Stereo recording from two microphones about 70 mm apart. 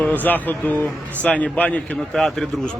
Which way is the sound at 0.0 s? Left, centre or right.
Left.